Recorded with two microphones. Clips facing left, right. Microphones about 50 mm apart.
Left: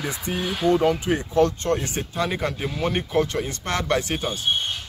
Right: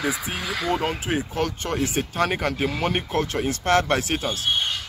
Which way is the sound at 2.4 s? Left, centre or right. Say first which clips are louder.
Right 2 dB; right.